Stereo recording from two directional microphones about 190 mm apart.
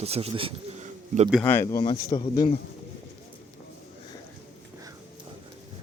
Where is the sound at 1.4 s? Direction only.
15° left (ahead or behind).